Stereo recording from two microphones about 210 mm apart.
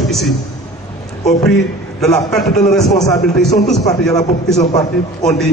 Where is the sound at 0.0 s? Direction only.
Centre (ahead or behind).